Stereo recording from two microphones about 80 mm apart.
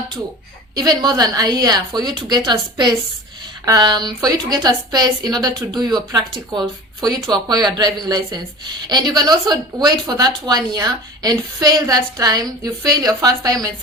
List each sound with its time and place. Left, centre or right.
0.8 s a woman's voice: right
4.2 s a woman's voice: right
7.3 s a woman's voice: right